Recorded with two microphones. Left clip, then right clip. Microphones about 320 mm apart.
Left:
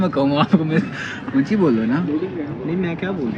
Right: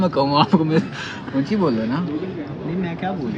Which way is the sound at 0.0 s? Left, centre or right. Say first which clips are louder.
Right 1 dB; centre.